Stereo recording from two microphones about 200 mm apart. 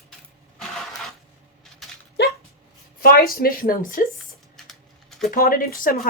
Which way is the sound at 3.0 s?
45° left (ahead or behind).